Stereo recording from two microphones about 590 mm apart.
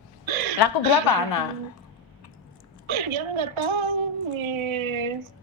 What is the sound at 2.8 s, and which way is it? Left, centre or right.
A woman's voice, right.